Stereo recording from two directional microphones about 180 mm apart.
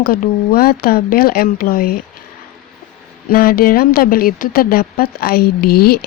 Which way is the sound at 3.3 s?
55° left (ahead or behind).